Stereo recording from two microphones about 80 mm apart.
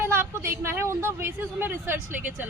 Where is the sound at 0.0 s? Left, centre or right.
Right.